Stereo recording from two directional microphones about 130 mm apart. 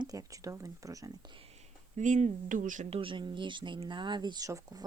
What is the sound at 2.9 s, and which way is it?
Speech, 45° right (ahead or behind).